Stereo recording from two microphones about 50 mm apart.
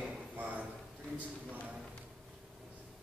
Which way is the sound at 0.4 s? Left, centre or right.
Right.